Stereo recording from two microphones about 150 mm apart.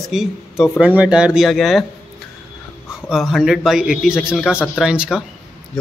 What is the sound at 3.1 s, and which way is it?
Speech, centre (ahead or behind).